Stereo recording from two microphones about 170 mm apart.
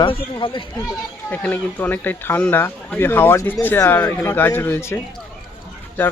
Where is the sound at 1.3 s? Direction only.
10° left (ahead or behind).